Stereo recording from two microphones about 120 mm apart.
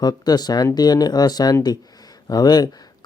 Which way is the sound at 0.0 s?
35° left (ahead or behind).